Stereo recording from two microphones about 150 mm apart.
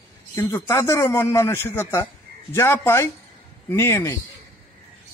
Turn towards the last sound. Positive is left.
turn(degrees=15)  # may be behind; listen again after turning